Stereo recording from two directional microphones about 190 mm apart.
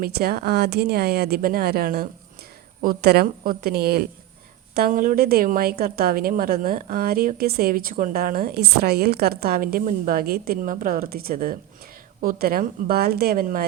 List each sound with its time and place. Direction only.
0.0 s a woman's voice: 55° right (ahead or behind)